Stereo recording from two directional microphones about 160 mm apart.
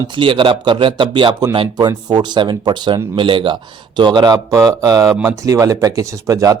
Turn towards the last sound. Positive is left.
turn(degrees=-20)  # may be behind; listen again after turning